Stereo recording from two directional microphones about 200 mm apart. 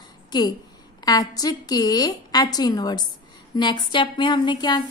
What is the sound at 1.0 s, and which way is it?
A woman's voice, 20° left (ahead or behind).